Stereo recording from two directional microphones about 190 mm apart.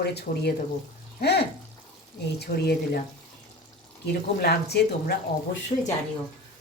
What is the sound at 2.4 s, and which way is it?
Speech, 55° left (ahead or behind).